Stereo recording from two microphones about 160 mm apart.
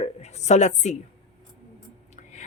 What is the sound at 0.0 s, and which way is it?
Speech, 45° left (ahead or behind).